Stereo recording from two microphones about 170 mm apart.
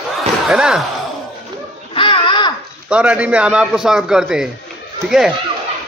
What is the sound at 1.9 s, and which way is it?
Babbling, 30° left (ahead or behind).